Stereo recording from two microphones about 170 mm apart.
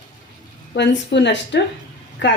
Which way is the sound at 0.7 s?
90° left.